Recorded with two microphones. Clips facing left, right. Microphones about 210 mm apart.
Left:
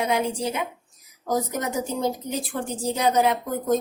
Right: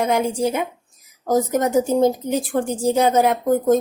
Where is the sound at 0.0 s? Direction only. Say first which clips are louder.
Right 5 dB; 45° right (ahead or behind).